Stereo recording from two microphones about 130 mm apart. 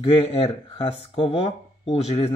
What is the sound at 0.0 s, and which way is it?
Speech, 45° left (ahead or behind).